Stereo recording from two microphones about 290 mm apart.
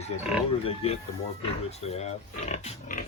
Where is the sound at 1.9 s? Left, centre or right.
Left.